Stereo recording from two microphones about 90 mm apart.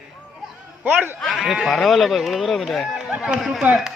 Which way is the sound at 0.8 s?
20° right (ahead or behind).